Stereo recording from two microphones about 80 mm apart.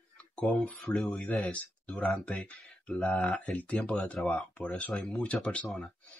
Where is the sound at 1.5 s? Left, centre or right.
Centre.